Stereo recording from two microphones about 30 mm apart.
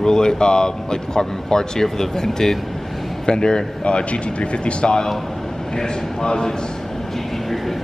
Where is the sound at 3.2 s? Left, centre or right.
Left.